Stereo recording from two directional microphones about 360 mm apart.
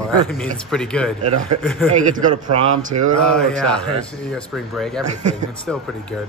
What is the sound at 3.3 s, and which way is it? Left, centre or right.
Speech, centre.